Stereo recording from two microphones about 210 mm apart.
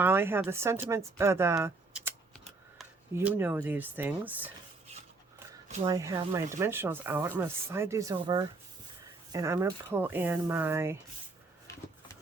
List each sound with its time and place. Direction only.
0.0 s speech: 10° right (ahead or behind)
3.2 s speech: 10° right (ahead or behind)
5.6 s speech: 35° right (ahead or behind)
5.9 s speech: 15° right (ahead or behind)